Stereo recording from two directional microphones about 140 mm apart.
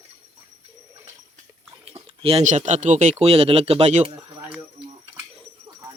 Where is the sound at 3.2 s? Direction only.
45° right (ahead or behind).